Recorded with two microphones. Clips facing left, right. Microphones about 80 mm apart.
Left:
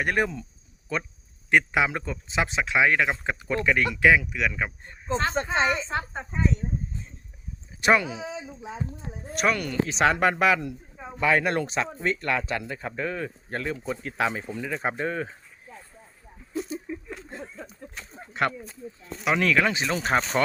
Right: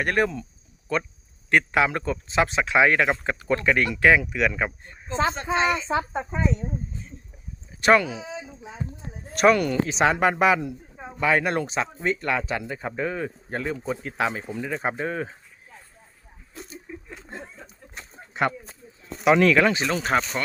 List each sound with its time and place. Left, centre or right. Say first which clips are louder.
0.0 s speech: right 2 dB; centre
4.0 s speech: right 2 dB; centre
5.3 s speech: even; left
5.7 s speech: right 4 dB; centre
7.8 s speech: right 3 dB; centre
8.9 s speech: left 2 dB; centre
11.2 s speech: right 1 dB; centre
16.9 s chuckle: left 5 dB; centre
17.2 s a sound: even; right
17.9 s a sound: right 2 dB; centre
19.2 s speech: right 5 dB; centre
19.7 s speech: right 1 dB; centre